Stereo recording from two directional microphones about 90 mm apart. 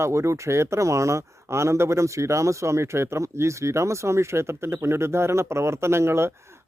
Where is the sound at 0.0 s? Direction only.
30° right (ahead or behind).